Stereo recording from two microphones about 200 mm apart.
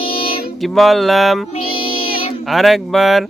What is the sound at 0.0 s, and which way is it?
Music, 25° left (ahead or behind).